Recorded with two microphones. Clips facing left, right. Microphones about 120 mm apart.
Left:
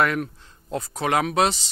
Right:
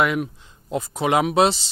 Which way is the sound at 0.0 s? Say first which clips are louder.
Right 1 dB; 10° right (ahead or behind).